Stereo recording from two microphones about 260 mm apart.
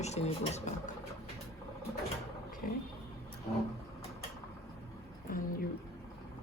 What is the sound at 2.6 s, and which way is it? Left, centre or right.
Speech, left.